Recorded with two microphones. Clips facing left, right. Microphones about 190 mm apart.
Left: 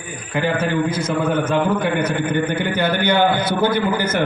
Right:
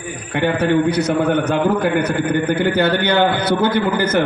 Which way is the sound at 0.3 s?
70° right (ahead or behind).